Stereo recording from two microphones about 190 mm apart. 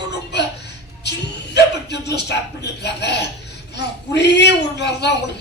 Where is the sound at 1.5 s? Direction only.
60° left (ahead or behind).